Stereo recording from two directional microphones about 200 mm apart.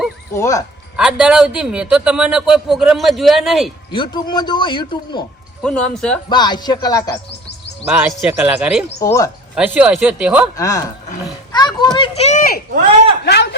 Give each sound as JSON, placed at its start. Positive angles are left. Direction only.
{"t": 0.3, "sound": "speech", "side_deg": 15}
{"t": 0.9, "sound": "a man's voice", "side_deg": -5}
{"t": 3.9, "sound": "a man's voice", "side_deg": 25}
{"t": 5.6, "sound": "a man's voice", "side_deg": 5}
{"t": 6.2, "sound": "a man's voice", "side_deg": 20}
{"t": 7.9, "sound": "a man's voice", "side_deg": -10}
{"t": 9.0, "sound": "speech", "side_deg": 15}
{"t": 9.6, "sound": "a man's voice", "side_deg": -5}
{"t": 10.6, "sound": "a man's voice", "side_deg": 15}
{"t": 13.2, "sound": "a man's voice", "side_deg": 60}